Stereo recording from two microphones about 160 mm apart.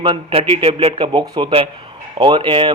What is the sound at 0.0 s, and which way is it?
Speech, 35° right (ahead or behind).